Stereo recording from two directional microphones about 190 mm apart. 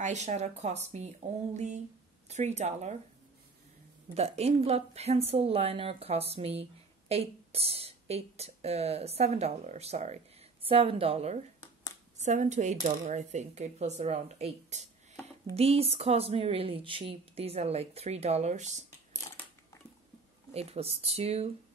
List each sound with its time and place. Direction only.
0.0 s speech: 40° right (ahead or behind)
4.1 s speech: 35° right (ahead or behind)
20.5 s speech: 30° right (ahead or behind)